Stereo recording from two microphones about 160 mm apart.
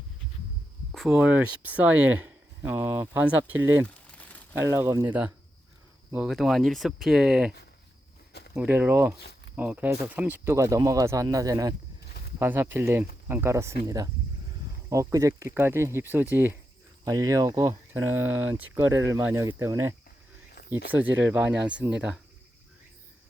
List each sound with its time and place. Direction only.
0.9 s speech: 5° right (ahead or behind)
8.5 s speech: 10° right (ahead or behind)
9.1 s a sound: 90° left
9.6 s speech: 10° right (ahead or behind)
20.6 s a sound: 90° left
20.9 s speech: 10° right (ahead or behind)